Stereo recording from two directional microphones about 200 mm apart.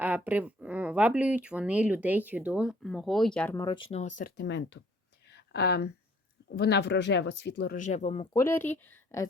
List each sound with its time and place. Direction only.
0.0 s speech: 10° right (ahead or behind); by 3.8 s 15° left (ahead or behind)
4.2 s speech: 60° left (ahead or behind)
5.3 s a sound: 55° left (ahead or behind)
6.5 s speech: 55° left (ahead or behind); by 8.4 s 25° left (ahead or behind)
8.4 s a woman's voice: 10° left (ahead or behind)